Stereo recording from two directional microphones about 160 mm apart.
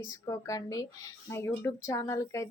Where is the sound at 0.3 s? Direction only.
20° left (ahead or behind).